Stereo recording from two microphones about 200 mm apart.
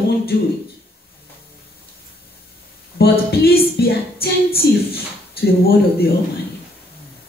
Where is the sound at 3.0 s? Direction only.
50° left (ahead or behind).